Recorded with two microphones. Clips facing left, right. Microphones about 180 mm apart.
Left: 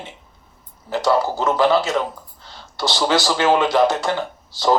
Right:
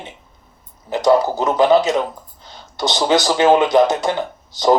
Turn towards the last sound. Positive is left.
turn(degrees=-20)  # may be behind; listen again after turning